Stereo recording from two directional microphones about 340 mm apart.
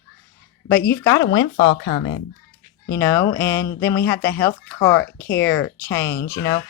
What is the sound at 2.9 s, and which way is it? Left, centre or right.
Speech, centre.